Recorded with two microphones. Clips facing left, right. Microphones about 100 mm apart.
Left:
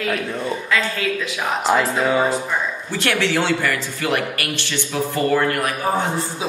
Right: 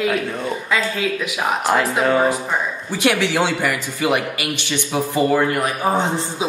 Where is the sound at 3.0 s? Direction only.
15° right (ahead or behind).